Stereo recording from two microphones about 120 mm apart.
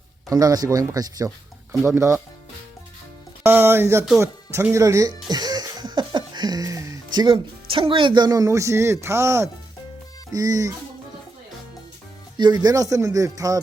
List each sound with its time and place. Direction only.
0.3 s speech: 30° right (ahead or behind)
3.4 s speech: 20° right (ahead or behind)
12.4 s speech: 35° right (ahead or behind)